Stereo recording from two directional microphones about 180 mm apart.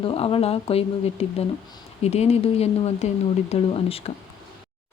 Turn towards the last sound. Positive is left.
turn(degrees=35)  # may be behind; listen again after turning